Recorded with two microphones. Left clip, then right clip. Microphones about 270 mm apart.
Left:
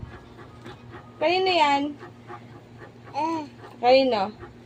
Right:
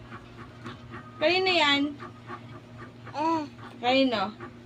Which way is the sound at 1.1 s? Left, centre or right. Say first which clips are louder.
Left 2 dB; centre.